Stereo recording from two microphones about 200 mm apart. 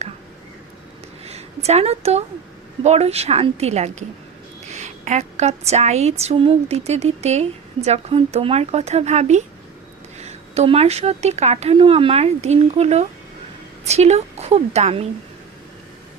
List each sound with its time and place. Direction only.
1.2 s a woman's voice: 30° right (ahead or behind)